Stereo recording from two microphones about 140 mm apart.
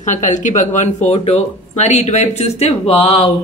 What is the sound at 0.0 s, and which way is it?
A woman's voice, 65° left (ahead or behind).